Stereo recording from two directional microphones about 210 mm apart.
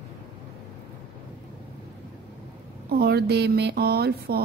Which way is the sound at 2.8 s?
50° right (ahead or behind).